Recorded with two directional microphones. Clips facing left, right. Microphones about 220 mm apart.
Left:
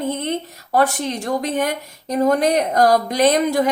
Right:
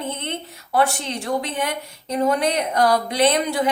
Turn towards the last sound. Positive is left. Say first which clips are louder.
# left 3 dB
turn(degrees=45)  # may be behind; listen again after turning